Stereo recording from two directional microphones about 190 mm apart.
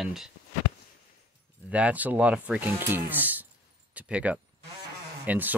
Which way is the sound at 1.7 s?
5° right (ahead or behind).